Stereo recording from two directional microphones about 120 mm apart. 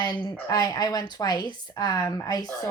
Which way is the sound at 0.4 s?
30° left (ahead or behind).